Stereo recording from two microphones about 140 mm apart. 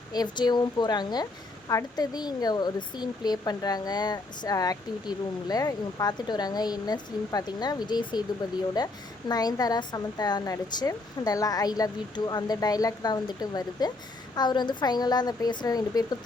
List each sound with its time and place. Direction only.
0.1 s speech: 30° left (ahead or behind)